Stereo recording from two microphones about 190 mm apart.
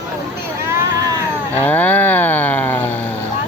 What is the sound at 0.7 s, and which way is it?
Vehicle, 20° right (ahead or behind).